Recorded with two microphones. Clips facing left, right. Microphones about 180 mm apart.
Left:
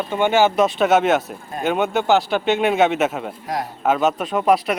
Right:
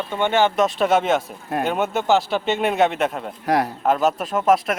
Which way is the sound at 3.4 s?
70° right (ahead or behind).